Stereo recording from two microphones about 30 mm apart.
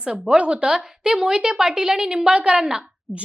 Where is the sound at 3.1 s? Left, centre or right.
Centre.